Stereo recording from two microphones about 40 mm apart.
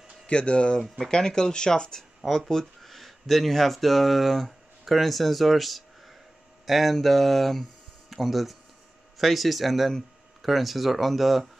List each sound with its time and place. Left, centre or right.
0.3 s speech: left
0.8 s speech: centre
1.1 s speech: centre
2.5 s speech: centre